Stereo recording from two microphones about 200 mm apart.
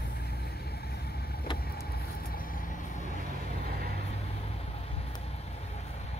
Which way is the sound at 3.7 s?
50° right (ahead or behind).